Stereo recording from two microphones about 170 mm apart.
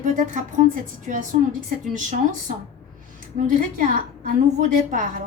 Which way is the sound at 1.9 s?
50° right (ahead or behind).